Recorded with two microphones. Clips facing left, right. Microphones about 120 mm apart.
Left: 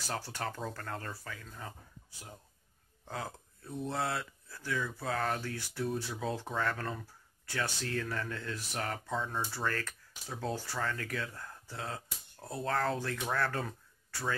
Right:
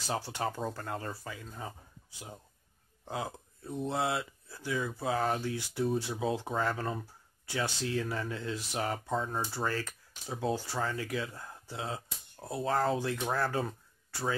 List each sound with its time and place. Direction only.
0.1 s speech: 15° right (ahead or behind)
3.7 s speech: 10° right (ahead or behind)
9.1 s speech: 40° right (ahead or behind)
9.4 s speech: 15° right (ahead or behind)
13.7 s a sound: 20° right (ahead or behind)